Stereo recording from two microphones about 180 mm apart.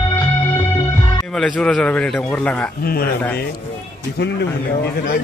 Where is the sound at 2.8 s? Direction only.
60° left (ahead or behind).